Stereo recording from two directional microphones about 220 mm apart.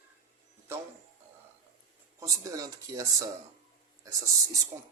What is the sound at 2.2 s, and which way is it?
Speech, 15° right (ahead or behind).